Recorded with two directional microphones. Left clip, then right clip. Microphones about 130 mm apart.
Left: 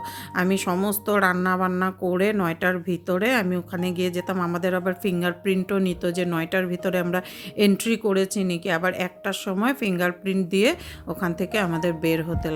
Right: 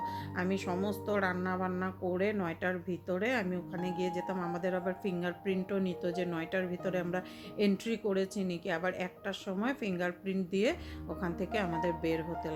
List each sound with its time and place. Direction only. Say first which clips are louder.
0.3 s a woman's voice: left 12 dB; 30° left (ahead or behind)